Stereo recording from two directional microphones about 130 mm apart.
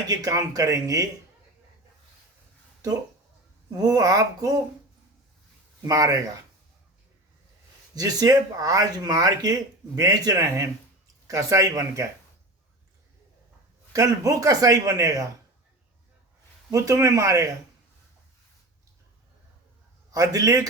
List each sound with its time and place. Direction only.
0.1 s speech: 25° right (ahead or behind)
3.8 s speech: 30° right (ahead or behind)
5.8 s speech: 25° right (ahead or behind)
7.9 s speech: 30° right (ahead or behind)
13.9 s speech: 25° right (ahead or behind)
16.7 s speech: 25° right (ahead or behind)
20.1 s speech: 25° right (ahead or behind)